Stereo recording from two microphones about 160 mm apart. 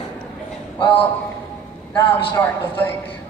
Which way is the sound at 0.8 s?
10° left (ahead or behind).